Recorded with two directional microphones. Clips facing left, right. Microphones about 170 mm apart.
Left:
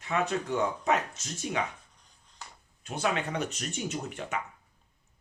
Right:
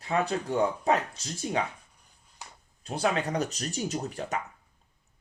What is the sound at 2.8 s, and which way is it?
Speech, 35° right (ahead or behind).